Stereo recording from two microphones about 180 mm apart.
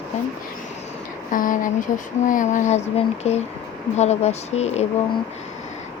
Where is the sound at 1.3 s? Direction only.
50° left (ahead or behind).